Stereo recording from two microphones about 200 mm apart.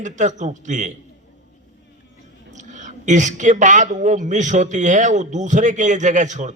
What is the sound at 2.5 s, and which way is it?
A man's voice, 35° right (ahead or behind).